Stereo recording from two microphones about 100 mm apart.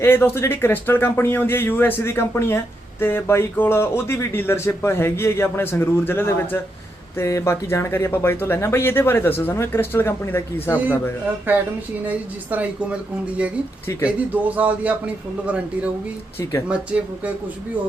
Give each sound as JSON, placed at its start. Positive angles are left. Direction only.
{"t": 0.0, "sound": "speech", "side_deg": 25}
{"t": 11.5, "sound": "a man's voice", "side_deg": -20}
{"t": 16.4, "sound": "speech", "side_deg": 30}
{"t": 16.6, "sound": "a man's voice", "side_deg": -10}